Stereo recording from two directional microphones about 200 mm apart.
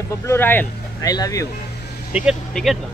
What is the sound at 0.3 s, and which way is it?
Speech, 10° left (ahead or behind).